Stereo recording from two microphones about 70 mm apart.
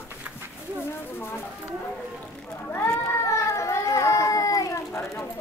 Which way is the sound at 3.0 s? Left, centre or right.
Left.